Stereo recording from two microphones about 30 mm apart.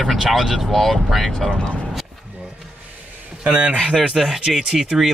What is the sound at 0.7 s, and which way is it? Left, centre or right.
Speech, centre.